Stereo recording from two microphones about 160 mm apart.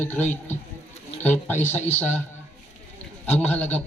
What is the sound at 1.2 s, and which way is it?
Speech, 10° left (ahead or behind).